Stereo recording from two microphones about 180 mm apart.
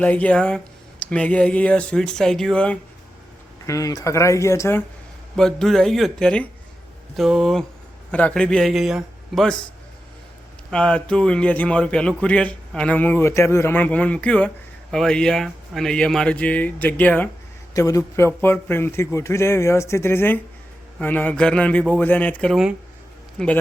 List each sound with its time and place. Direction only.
0.0 s a man's voice: 10° left (ahead or behind)
3.7 s a man's voice: 20° left (ahead or behind)
5.4 s speech: 5° left (ahead or behind)
10.7 s a man's voice: 5° left (ahead or behind)